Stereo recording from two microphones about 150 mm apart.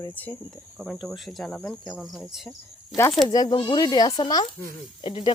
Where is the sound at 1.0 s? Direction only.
Centre (ahead or behind).